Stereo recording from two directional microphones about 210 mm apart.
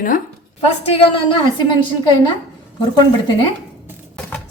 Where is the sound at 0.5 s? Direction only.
30° left (ahead or behind).